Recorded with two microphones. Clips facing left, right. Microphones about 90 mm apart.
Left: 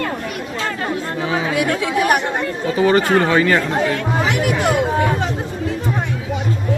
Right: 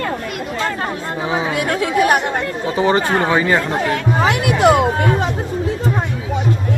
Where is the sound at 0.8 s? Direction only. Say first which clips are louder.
Even; 25° right (ahead or behind).